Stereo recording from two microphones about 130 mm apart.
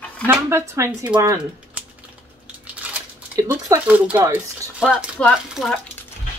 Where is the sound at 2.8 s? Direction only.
10° right (ahead or behind).